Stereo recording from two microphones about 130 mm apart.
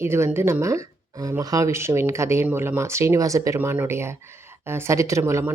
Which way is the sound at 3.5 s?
15° right (ahead or behind).